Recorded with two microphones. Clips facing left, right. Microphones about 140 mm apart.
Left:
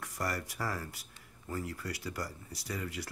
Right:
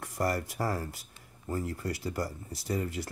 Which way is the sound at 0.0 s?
50° right (ahead or behind).